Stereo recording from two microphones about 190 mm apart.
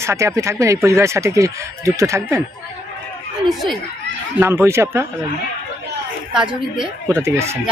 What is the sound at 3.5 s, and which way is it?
Speech, centre (ahead or behind).